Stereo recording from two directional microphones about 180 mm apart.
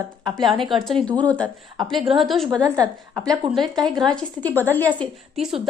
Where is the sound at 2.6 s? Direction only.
20° right (ahead or behind).